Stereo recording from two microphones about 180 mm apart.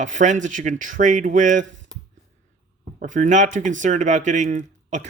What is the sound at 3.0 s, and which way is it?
Speech, 45° right (ahead or behind).